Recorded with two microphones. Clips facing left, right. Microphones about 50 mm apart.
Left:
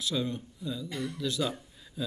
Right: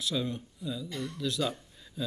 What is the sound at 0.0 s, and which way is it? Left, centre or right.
Speech, centre.